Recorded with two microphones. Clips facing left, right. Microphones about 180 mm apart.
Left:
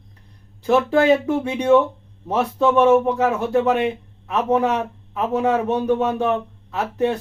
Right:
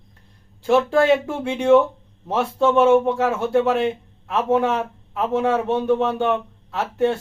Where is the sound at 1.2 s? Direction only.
Centre (ahead or behind).